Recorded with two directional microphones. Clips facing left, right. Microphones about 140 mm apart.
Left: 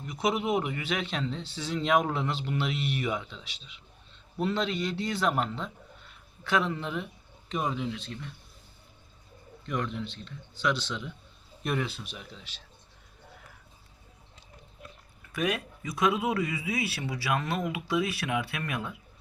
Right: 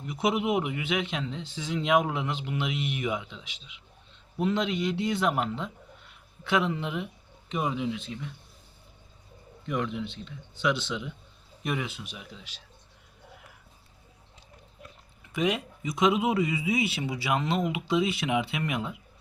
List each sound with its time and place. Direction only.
0.0 s speech: 20° right (ahead or behind)
9.6 s speech: 10° right (ahead or behind)
15.3 s a man's voice: 20° right (ahead or behind)